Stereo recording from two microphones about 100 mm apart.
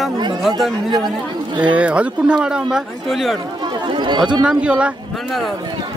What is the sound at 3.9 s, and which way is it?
Speech, 50° right (ahead or behind).